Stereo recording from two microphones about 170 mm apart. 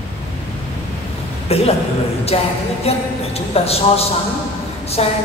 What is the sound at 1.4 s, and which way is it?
A man's voice, 35° left (ahead or behind).